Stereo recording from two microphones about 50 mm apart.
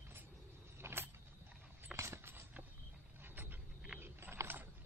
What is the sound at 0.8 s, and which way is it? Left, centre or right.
Vehicle, right.